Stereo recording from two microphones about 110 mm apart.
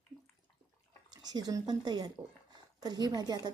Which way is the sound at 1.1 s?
40° right (ahead or behind).